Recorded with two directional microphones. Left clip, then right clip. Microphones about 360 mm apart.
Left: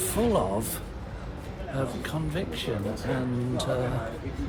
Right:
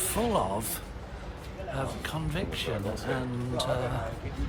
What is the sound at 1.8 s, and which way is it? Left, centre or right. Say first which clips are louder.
Speech: left 3 dB; centre.